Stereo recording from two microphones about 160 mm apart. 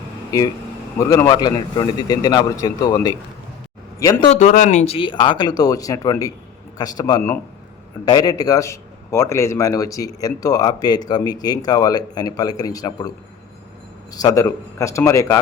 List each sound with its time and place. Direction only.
0.9 s speech: 20° left (ahead or behind)
4.4 s speech: 50° left (ahead or behind)
4.9 s speech: 30° left (ahead or behind)